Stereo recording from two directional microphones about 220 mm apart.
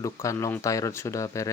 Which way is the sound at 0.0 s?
15° left (ahead or behind).